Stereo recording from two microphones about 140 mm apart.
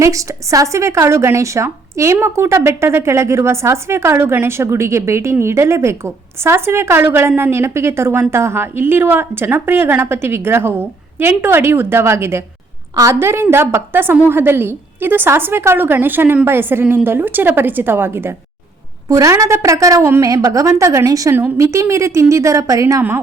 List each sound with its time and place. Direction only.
0.0 s a woman's voice: 20° right (ahead or behind)